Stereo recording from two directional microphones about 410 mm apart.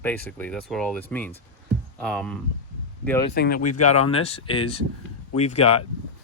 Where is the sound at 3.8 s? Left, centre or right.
Centre.